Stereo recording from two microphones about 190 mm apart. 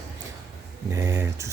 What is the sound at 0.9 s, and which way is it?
Speech, 15° right (ahead or behind).